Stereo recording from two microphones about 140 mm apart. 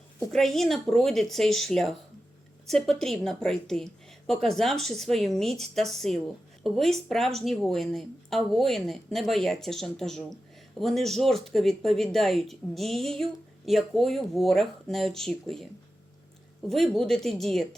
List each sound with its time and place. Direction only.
0.3 s speech: centre (ahead or behind)
16.6 s speech: centre (ahead or behind)